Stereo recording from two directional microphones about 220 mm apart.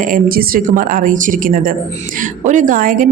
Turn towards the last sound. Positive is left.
turn(degrees=-40)  # may be behind; listen again after turning